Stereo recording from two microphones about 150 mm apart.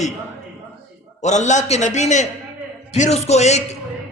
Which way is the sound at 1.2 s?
50° left (ahead or behind).